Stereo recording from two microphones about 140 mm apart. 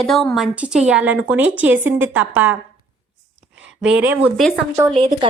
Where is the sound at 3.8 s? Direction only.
10° right (ahead or behind).